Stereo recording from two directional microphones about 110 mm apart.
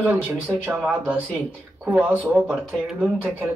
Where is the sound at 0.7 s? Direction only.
20° right (ahead or behind).